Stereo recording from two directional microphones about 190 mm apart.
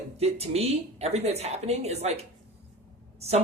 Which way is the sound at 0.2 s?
35° right (ahead or behind).